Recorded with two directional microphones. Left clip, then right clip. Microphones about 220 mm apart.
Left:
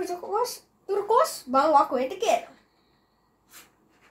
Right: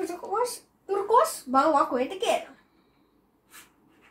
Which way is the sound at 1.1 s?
25° left (ahead or behind).